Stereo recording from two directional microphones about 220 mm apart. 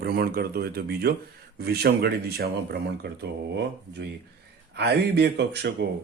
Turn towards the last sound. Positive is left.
turn(degrees=-50)  # may be behind; listen again after turning